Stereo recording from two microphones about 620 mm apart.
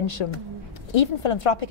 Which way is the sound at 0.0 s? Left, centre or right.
Left.